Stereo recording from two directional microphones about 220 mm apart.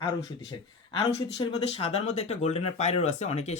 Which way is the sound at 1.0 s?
25° left (ahead or behind).